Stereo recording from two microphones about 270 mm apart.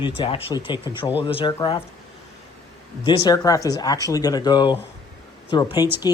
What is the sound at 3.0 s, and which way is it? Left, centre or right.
Speech, centre.